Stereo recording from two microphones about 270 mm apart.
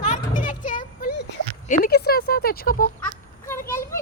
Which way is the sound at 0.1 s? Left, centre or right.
Left.